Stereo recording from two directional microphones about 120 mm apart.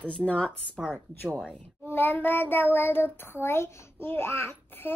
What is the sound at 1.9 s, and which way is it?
Child singing, 15° left (ahead or behind).